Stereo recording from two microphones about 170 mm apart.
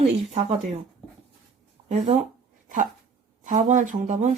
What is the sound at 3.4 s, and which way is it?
Speech, 45° right (ahead or behind).